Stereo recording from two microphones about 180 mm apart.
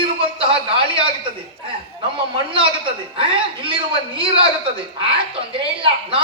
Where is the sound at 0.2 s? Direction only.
30° right (ahead or behind).